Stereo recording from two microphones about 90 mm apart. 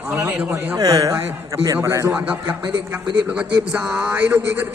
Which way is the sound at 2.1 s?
20° right (ahead or behind).